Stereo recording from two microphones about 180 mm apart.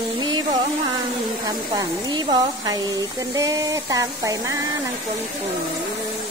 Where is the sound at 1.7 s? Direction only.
25° right (ahead or behind).